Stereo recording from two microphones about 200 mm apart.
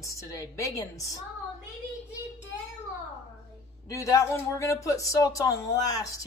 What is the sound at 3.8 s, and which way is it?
Speech, 15° left (ahead or behind).